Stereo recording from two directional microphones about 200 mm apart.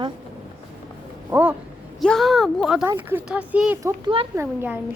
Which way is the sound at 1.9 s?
Centre (ahead or behind).